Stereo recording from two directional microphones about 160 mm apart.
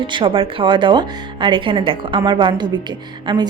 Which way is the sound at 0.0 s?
30° right (ahead or behind).